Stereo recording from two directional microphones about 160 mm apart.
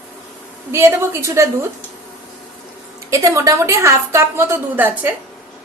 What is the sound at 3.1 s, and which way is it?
A woman's voice, 20° right (ahead or behind).